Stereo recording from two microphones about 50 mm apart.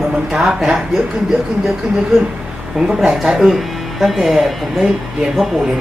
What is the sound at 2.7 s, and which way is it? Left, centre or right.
Speech, centre.